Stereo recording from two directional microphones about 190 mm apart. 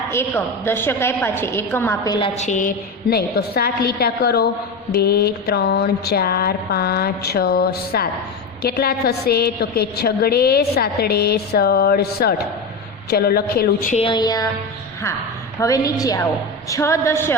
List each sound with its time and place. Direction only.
0.1 s a woman's voice: 15° left (ahead or behind)
2.1 s a woman's voice: 30° left (ahead or behind); by 14.0 s 50° left (ahead or behind)
14.0 s music: 25° left (ahead or behind)
15.6 s a woman's voice: 20° left (ahead or behind)